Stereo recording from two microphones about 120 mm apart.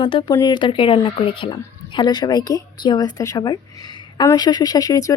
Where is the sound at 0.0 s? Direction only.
40° left (ahead or behind).